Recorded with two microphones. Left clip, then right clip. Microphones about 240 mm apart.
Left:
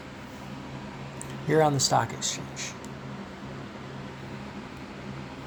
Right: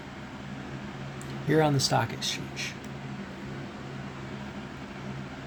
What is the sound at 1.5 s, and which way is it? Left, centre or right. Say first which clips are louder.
Speech: left 2 dB; centre.